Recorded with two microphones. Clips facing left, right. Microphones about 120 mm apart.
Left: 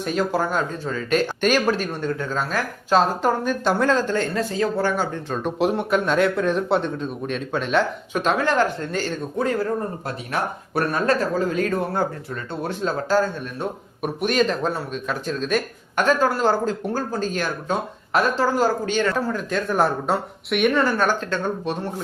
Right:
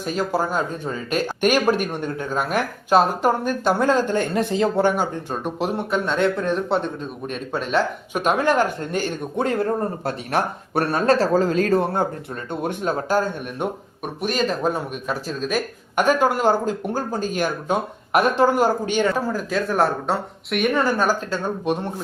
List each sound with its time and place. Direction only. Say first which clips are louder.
0.0 s speech: even; 5° right (ahead or behind)
5.5 s speech: left 3 dB; centre (ahead or behind); by 9.1 s 15° right (ahead or behind)
9.3 s speech: right 1 dB; 25° right (ahead or behind)
11.9 s speech: right 1 dB; 20° right (ahead or behind)
14.0 s speech: left 3 dB; centre (ahead or behind)